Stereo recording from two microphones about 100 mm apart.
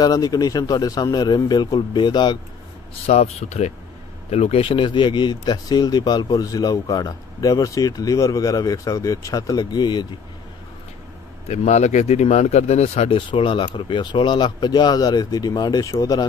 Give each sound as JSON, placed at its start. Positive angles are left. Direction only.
{"t": 0.0, "sound": "speech", "side_deg": 40}
{"t": 3.1, "sound": "speech", "side_deg": 90}
{"t": 11.4, "sound": "speech", "side_deg": 90}
{"t": 13.3, "sound": "speech", "side_deg": 55}